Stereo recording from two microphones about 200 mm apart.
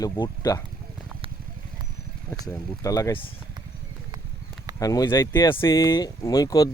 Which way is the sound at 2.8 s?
15° left (ahead or behind).